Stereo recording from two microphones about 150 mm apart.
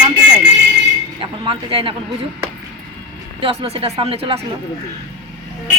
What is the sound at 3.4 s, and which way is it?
Speech, 40° right (ahead or behind).